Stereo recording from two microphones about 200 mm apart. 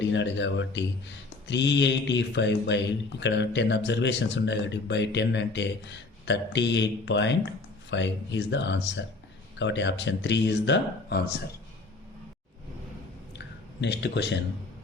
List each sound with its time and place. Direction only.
0.0 s speech: 65° left (ahead or behind)
13.8 s speech: 60° left (ahead or behind)